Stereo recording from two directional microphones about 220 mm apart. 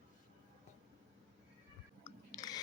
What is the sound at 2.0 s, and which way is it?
Chewing, 15° left (ahead or behind).